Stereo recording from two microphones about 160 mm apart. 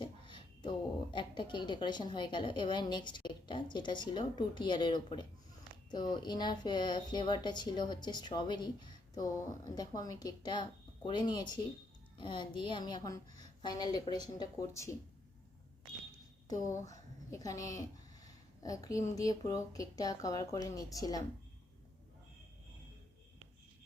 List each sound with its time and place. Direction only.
0.0 s a woman's voice: 30° left (ahead or behind)
16.9 s a woman's voice: 20° left (ahead or behind)